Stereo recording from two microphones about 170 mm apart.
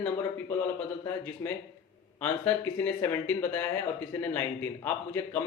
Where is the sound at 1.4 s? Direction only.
25° left (ahead or behind).